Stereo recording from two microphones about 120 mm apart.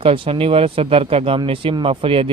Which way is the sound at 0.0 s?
50° right (ahead or behind).